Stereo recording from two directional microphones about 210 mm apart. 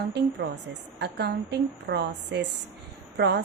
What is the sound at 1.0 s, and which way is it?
A woman's voice, 50° right (ahead or behind).